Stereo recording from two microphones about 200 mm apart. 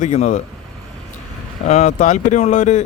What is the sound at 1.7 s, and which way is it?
Speech, 35° left (ahead or behind).